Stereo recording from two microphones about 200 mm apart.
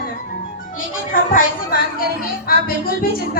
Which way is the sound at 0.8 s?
45° left (ahead or behind).